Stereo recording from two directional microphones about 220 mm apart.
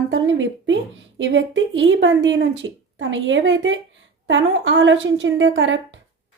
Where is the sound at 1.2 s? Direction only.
60° right (ahead or behind).